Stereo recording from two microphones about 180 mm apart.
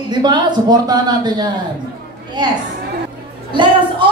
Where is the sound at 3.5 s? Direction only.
25° right (ahead or behind).